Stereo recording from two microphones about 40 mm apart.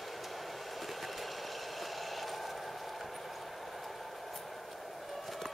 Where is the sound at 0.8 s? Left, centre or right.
Centre.